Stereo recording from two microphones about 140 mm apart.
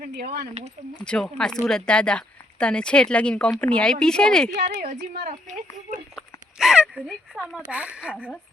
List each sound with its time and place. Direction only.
0.0 s speech: 90° right
0.9 s speech: 5° left (ahead or behind)
4.5 s a woman's voice: 75° right (ahead or behind)
4.9 s speech: 60° right (ahead or behind)
6.1 s a sound: 5° right (ahead or behind)
7.7 s speech: 10° right (ahead or behind)